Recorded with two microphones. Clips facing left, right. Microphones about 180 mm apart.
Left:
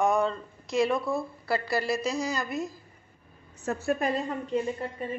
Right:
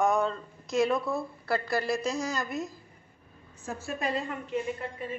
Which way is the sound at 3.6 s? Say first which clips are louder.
Left 7 dB; 65° left (ahead or behind).